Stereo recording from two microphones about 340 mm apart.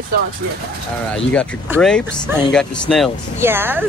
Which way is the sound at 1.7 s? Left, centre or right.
Centre.